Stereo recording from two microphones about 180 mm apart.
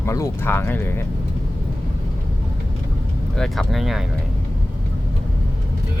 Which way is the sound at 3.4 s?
Centre (ahead or behind).